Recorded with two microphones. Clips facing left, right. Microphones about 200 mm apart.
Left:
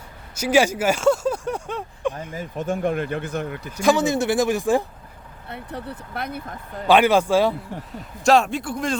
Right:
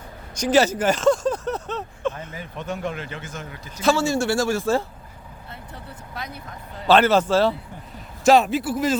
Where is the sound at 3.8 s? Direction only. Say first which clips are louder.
Left 1 dB; 20° left (ahead or behind).